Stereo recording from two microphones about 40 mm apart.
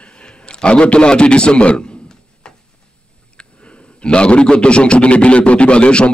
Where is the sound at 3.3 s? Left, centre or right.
Left.